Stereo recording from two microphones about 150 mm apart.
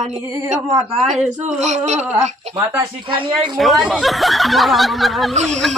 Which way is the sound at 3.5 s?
Centre (ahead or behind).